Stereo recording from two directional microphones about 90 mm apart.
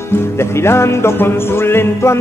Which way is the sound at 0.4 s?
30° left (ahead or behind).